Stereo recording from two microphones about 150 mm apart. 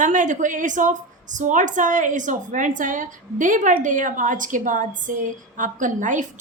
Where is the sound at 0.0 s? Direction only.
60° right (ahead or behind).